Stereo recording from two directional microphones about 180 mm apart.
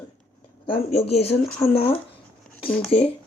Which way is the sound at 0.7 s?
35° left (ahead or behind).